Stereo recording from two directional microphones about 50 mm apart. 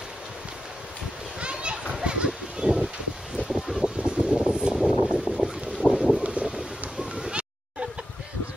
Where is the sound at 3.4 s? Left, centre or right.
Centre.